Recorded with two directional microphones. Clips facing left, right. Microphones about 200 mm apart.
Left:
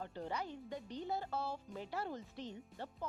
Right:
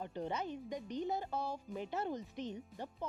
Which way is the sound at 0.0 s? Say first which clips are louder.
Right 3 dB; 20° right (ahead or behind).